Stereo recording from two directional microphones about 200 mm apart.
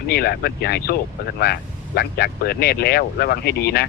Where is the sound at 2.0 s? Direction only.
50° left (ahead or behind).